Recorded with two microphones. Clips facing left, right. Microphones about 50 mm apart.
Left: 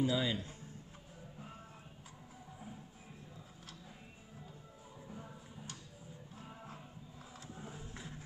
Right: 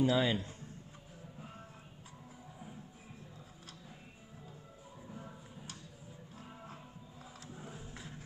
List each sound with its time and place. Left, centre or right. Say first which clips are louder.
0.0 s a man's voice: right 4 dB; right
5.0 s a sound: right 1 dB; centre
7.5 s music: even; centre